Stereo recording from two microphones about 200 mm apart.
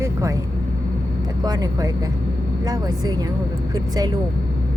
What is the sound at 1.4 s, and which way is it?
Speech, 20° right (ahead or behind).